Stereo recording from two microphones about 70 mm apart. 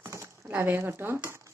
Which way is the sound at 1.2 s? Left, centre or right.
Right.